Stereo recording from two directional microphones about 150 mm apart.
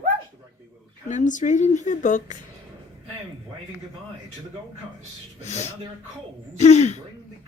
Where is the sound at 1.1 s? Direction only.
55° left (ahead or behind).